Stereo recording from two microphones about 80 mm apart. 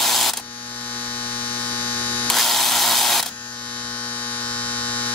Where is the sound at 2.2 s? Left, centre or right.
Centre.